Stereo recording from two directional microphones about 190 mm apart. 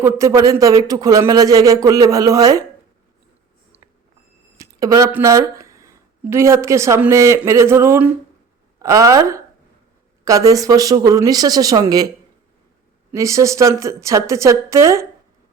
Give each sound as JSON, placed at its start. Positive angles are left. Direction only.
{"t": 0.0, "sound": "speech", "side_deg": -15}
{"t": 4.5, "sound": "a woman's voice", "side_deg": -20}
{"t": 13.1, "sound": "a woman's voice", "side_deg": -15}